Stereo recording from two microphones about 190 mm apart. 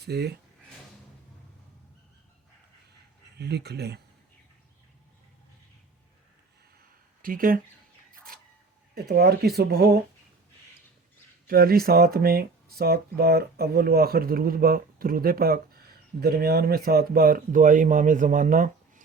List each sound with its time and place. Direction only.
0.0 s speech: 60° right (ahead or behind)
3.3 s speech: 60° right (ahead or behind)
7.2 s speech: 45° right (ahead or behind)
8.1 s a sound: 50° right (ahead or behind)
9.0 s speech: 55° right (ahead or behind)
11.4 s speech: 50° right (ahead or behind)